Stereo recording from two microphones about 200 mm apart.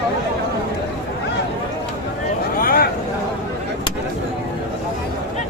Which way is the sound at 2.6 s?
45° left (ahead or behind).